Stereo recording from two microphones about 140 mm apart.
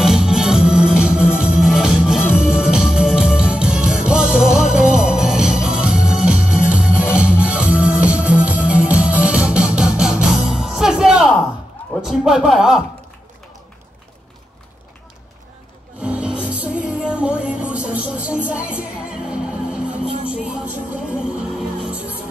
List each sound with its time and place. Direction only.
0.0 s music: 5° right (ahead or behind)
11.9 s a sound: 5° right (ahead or behind)
16.0 s music: 10° right (ahead or behind)